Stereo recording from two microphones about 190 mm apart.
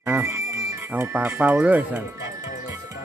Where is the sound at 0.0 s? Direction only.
10° right (ahead or behind).